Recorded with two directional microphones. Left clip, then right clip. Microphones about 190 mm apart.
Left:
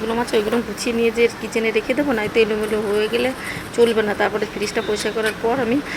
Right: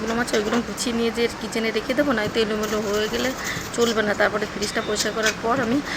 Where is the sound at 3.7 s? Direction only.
Centre (ahead or behind).